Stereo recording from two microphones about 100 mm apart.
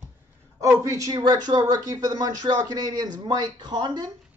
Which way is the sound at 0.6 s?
30° right (ahead or behind).